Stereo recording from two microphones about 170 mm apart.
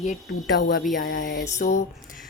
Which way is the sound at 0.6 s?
55° left (ahead or behind).